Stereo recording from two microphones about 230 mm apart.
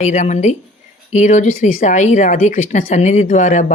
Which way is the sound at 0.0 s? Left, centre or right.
Left.